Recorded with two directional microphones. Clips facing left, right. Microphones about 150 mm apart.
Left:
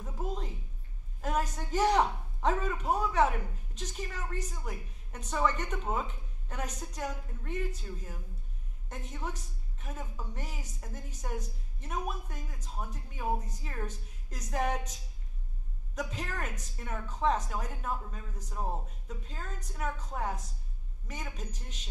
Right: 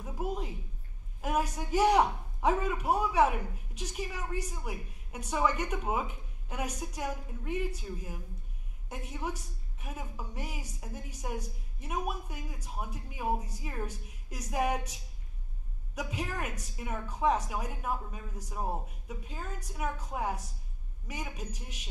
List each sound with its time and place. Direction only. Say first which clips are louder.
0.0 s a man's voice: right 2 dB; 10° right (ahead or behind)